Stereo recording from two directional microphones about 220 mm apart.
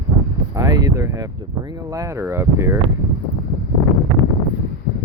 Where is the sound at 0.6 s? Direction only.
15° right (ahead or behind).